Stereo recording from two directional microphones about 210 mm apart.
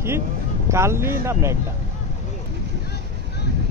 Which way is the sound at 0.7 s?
15° right (ahead or behind).